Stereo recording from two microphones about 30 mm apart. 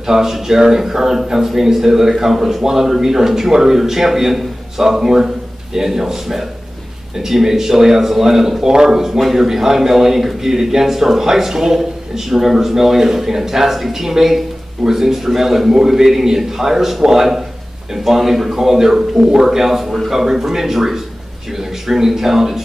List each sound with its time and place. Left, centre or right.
0.0 s speech: centre